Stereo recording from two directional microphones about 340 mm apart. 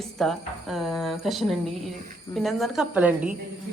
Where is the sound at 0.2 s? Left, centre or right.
Centre.